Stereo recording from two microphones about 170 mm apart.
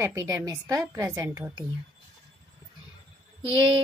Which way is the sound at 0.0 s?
15° right (ahead or behind).